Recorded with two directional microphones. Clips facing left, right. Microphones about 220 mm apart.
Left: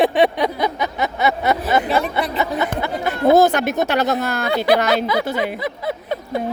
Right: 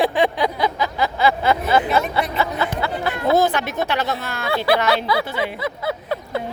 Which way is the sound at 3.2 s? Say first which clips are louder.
Left 5 dB; 45° left (ahead or behind).